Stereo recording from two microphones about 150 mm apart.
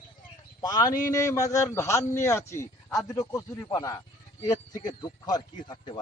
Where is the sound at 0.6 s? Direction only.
25° left (ahead or behind).